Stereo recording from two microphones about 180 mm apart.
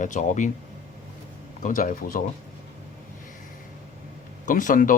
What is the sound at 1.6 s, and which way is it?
Speech, 50° left (ahead or behind).